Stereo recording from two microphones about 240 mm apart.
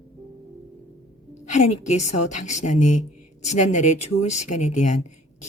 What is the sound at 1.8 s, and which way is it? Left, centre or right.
Speech, left.